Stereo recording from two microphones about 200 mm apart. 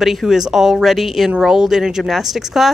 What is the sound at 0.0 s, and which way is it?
Speech, centre (ahead or behind).